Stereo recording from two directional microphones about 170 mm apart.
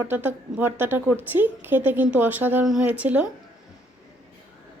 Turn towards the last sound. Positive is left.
turn(degrees=-10)  # may be behind; listen again after turning